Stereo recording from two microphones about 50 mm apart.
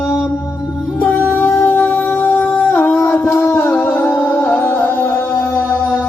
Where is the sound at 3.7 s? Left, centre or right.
Left.